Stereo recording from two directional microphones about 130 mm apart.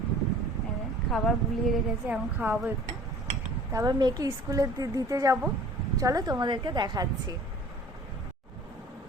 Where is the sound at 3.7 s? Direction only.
25° right (ahead or behind).